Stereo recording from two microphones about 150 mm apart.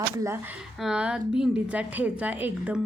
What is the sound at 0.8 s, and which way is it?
A woman's voice, 5° right (ahead or behind).